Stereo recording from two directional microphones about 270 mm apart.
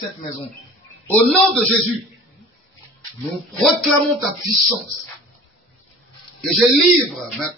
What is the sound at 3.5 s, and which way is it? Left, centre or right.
Speech, centre.